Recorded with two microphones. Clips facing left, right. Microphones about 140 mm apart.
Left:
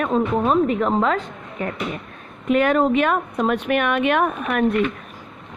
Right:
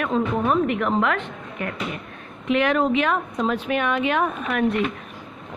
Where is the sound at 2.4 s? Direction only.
45° left (ahead or behind).